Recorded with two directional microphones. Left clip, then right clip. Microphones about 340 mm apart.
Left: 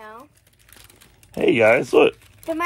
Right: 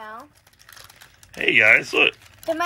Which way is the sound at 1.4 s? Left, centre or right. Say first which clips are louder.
Even; centre.